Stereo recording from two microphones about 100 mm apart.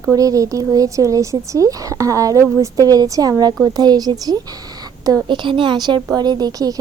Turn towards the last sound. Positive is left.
turn(degrees=-40)  # may be behind; listen again after turning